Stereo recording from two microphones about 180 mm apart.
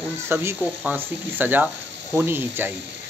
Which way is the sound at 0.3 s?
15° right (ahead or behind).